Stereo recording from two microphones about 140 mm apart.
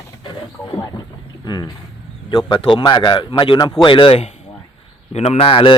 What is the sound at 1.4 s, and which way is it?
Speech, 30° left (ahead or behind).